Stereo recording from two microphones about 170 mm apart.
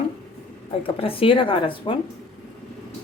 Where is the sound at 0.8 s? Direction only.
35° left (ahead or behind).